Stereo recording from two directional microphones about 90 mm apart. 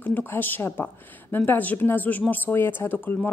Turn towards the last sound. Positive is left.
turn(degrees=25)  # may be behind; listen again after turning